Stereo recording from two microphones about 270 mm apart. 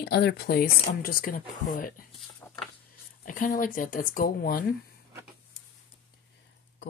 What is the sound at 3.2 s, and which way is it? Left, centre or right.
Speech, left.